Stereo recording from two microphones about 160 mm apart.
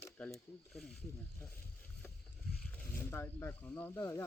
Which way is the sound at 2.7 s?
10° left (ahead or behind).